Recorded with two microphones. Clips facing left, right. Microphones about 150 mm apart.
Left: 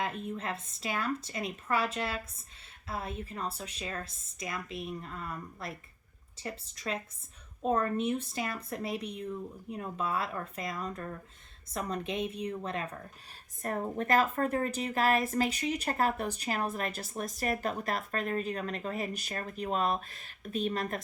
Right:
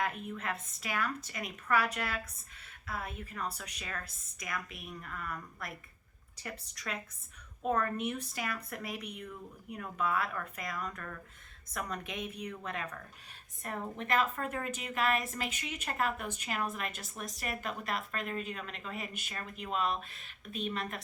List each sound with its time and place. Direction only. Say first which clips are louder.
0.0 s a woman's voice: left 1 dB; 30° left (ahead or behind)
13.6 s a woman's voice: left 6 dB; 40° left (ahead or behind)